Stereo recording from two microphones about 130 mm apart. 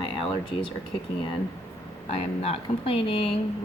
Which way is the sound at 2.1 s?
50° left (ahead or behind).